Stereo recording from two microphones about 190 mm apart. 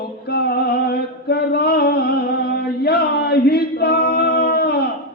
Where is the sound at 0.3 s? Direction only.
60° left (ahead or behind).